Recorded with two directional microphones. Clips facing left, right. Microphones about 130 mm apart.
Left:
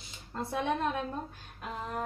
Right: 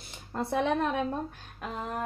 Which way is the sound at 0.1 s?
65° right (ahead or behind).